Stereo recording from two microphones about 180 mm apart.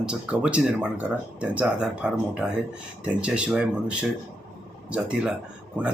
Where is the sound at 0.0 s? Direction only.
5° right (ahead or behind).